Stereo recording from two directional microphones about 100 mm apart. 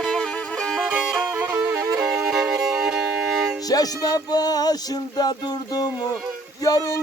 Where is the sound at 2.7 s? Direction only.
5° right (ahead or behind).